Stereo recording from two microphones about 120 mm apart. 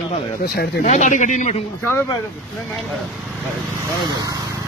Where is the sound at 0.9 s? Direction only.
90° left.